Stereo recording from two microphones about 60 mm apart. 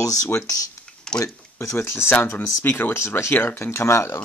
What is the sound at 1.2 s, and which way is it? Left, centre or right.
Speech, left.